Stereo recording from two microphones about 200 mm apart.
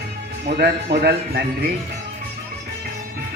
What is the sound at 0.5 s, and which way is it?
Speech, 55° right (ahead or behind).